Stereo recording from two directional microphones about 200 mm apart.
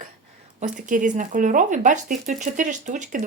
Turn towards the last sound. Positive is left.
turn(degrees=-40)  # may be behind; listen again after turning